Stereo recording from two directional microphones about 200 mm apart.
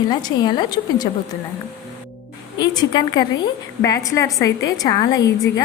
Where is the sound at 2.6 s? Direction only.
20° left (ahead or behind).